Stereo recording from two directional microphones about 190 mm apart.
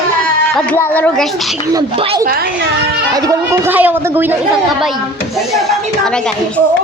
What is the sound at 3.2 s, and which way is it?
A woman's voice, 15° right (ahead or behind).